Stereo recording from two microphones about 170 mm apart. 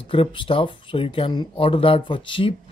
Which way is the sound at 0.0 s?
30° left (ahead or behind).